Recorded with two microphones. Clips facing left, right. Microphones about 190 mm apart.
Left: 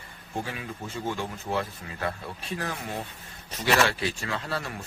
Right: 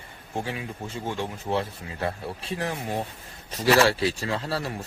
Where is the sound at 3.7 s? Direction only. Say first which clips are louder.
Right 5 dB; 30° right (ahead or behind).